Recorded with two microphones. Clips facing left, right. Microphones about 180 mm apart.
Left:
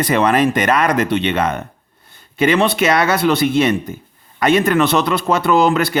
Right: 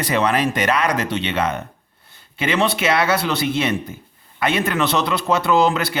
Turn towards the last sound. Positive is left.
turn(degrees=55)  # may be behind; listen again after turning